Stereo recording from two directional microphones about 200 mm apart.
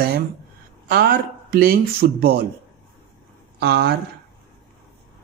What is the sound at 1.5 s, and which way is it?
Speech, 50° right (ahead or behind).